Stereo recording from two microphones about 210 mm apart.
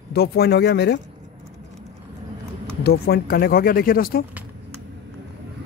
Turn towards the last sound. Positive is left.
turn(degrees=45)  # may be behind; listen again after turning